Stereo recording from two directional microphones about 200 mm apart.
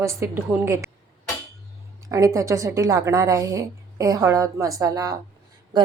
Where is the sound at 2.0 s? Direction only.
15° right (ahead or behind).